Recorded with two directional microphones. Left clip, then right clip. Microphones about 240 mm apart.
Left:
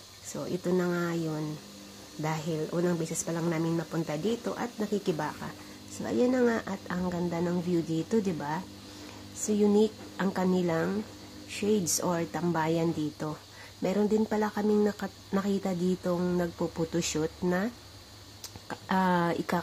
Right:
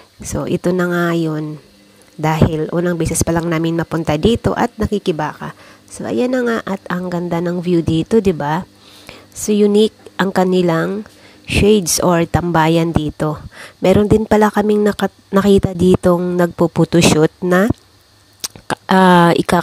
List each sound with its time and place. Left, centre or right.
0.3 s speech: right
9.8 s speech: right
18.4 s a sound: right